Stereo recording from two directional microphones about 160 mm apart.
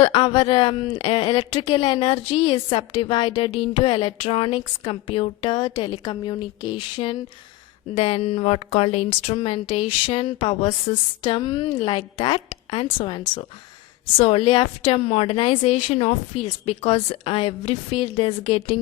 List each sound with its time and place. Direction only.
0.0 s a woman's voice: 35° left (ahead or behind)